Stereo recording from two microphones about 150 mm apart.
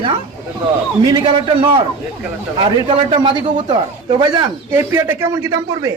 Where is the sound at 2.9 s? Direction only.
35° right (ahead or behind).